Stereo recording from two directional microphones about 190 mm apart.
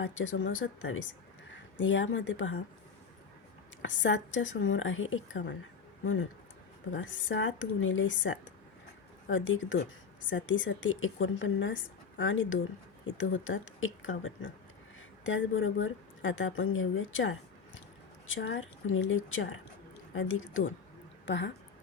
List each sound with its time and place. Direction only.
0.0 s speech: 90° left
3.8 s speech: 85° left
6.9 s speech: 90° left
18.3 s speech: 80° left
21.2 s speech: 70° left (ahead or behind)